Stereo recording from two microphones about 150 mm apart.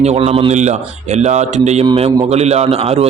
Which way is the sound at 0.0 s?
45° right (ahead or behind).